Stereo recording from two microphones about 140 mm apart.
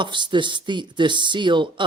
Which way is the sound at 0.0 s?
35° right (ahead or behind).